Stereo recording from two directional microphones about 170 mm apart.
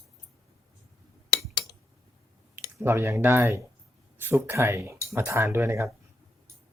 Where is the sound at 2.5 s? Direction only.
15° right (ahead or behind).